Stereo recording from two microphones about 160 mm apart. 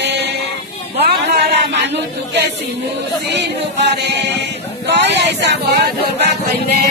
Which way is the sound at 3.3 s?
90° right.